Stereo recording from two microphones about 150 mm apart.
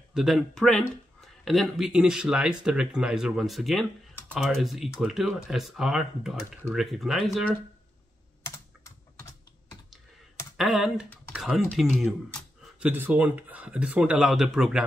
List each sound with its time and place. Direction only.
0.1 s speech: 5° right (ahead or behind)
8.5 s computer keyboard: 20° left (ahead or behind)
10.6 s speech: 5° right (ahead or behind)
12.8 s speech: 10° right (ahead or behind)